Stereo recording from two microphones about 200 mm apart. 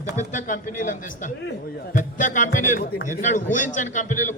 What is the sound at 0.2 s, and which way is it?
Speech, 40° left (ahead or behind).